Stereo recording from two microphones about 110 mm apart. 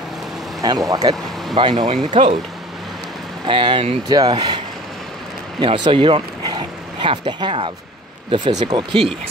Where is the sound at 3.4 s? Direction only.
50° right (ahead or behind).